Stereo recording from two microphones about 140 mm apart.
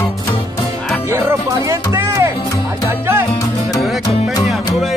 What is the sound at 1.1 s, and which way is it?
Music, 20° right (ahead or behind).